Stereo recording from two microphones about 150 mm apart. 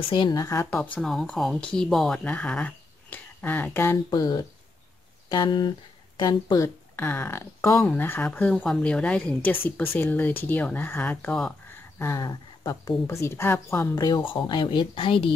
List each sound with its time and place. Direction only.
0.1 s speech: 30° left (ahead or behind)
0.9 s speech: 5° left (ahead or behind)
4.1 s speech: 25° left (ahead or behind)
7.0 s speech: 15° left (ahead or behind)
13.9 s speech: 30° left (ahead or behind)